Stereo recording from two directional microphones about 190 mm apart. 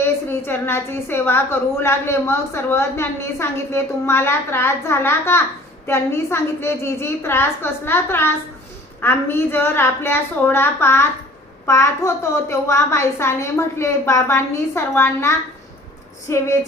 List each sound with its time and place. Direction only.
0.0 s a woman's voice: 10° left (ahead or behind)